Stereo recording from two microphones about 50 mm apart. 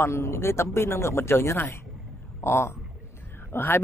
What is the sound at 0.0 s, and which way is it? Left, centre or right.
Speech, left.